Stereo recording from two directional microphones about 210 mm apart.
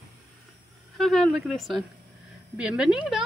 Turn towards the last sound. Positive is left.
turn(degrees=0)  # may be behind; listen again after turning